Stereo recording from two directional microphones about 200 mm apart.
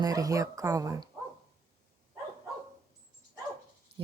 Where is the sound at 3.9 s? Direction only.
30° right (ahead or behind).